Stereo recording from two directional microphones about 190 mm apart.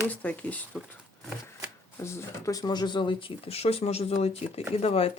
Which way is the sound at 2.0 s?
15° left (ahead or behind).